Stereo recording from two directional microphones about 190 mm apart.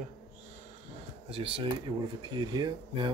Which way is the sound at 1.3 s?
30° right (ahead or behind).